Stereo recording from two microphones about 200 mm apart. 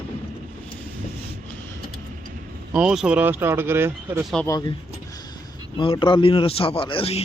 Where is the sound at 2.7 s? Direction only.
5° right (ahead or behind).